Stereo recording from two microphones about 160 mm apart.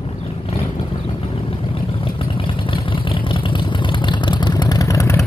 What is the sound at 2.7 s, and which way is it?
Vehicle, 30° left (ahead or behind).